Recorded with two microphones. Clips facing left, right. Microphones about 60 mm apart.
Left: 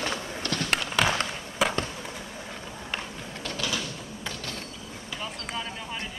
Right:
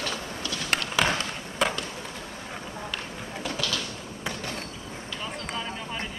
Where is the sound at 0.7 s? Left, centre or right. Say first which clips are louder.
Right 1 dB; centre.